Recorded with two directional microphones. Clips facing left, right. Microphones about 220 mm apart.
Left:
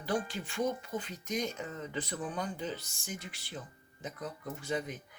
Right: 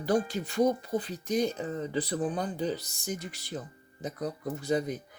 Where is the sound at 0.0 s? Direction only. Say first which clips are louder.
Right 7 dB; 40° right (ahead or behind).